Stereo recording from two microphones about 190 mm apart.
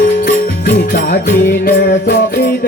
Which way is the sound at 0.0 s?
50° left (ahead or behind).